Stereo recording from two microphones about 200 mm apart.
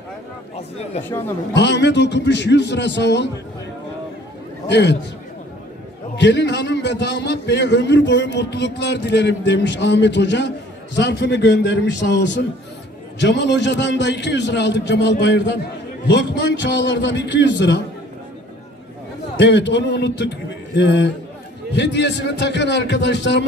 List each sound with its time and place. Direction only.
1.0 s speech: 10° left (ahead or behind)
1.5 s a man's voice: 60° left (ahead or behind)
4.6 s a man's voice: 60° left (ahead or behind)
6.1 s a man's voice: 60° left (ahead or behind)
19.3 s a man's voice: 60° left (ahead or behind)